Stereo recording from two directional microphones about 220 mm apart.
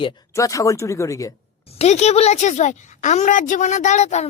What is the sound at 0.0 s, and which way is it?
Speech, 15° left (ahead or behind).